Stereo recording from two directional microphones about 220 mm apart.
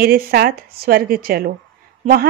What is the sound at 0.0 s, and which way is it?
A woman's voice, 45° right (ahead or behind).